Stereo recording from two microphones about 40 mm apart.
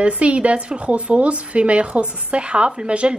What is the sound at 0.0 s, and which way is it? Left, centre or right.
A woman's voice, right.